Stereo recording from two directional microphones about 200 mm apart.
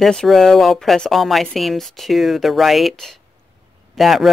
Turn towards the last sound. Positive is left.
turn(degrees=0)  # may be behind; listen again after turning